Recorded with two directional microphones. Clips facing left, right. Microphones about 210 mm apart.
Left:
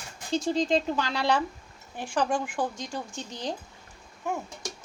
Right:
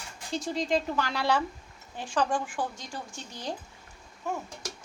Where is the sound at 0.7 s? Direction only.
20° left (ahead or behind).